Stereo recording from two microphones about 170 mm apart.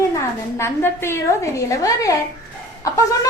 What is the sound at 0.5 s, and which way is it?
A woman's voice, 15° left (ahead or behind).